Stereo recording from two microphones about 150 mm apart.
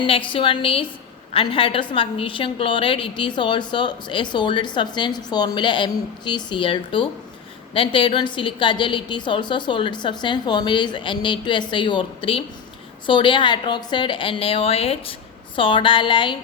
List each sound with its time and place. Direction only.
0.0 s a woman's voice: 35° left (ahead or behind)